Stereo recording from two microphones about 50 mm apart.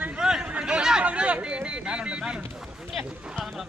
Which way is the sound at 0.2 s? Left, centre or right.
Centre.